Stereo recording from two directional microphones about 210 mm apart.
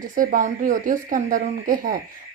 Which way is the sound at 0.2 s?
40° right (ahead or behind).